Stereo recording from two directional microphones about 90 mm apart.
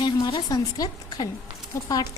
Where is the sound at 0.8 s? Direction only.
45° left (ahead or behind).